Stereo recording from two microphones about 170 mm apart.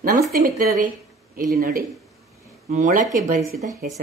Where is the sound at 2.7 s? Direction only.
45° right (ahead or behind).